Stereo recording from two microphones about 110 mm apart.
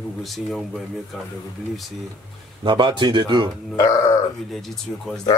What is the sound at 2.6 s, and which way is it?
Speech, 45° right (ahead or behind).